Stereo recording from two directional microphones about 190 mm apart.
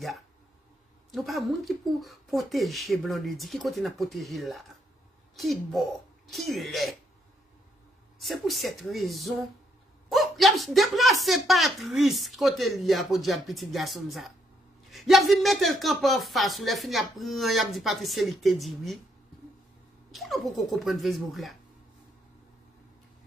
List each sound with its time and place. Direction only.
1.1 s speech: centre (ahead or behind)
8.2 s speech: centre (ahead or behind)
20.1 s speech: centre (ahead or behind)